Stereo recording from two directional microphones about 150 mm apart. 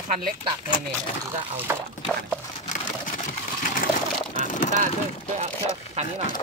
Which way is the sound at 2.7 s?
60° left (ahead or behind).